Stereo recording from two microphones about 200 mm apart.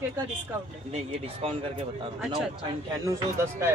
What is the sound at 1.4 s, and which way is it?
Speech, 30° right (ahead or behind).